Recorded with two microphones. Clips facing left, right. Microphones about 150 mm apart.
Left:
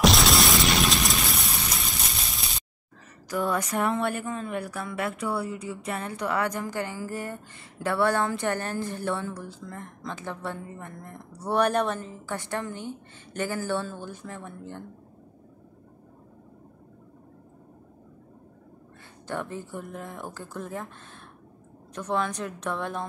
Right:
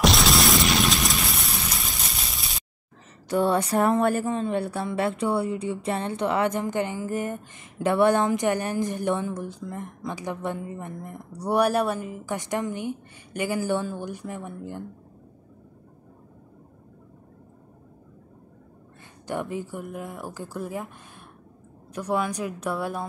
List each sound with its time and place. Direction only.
0.0 s a sound: centre (ahead or behind)
3.3 s speech: 30° right (ahead or behind); by 14.9 s 10° right (ahead or behind)
19.2 s speech: 15° right (ahead or behind)
21.9 s speech: 10° right (ahead or behind)